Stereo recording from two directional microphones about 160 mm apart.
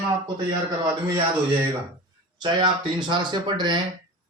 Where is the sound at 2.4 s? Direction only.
30° right (ahead or behind).